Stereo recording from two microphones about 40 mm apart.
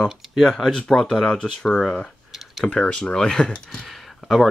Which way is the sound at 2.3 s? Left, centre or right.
Centre.